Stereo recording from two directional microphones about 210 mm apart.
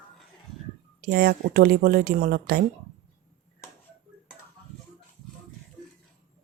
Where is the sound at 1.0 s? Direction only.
45° right (ahead or behind).